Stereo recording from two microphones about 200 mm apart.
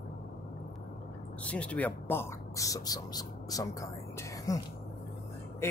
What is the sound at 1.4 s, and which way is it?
Speech, 5° left (ahead or behind).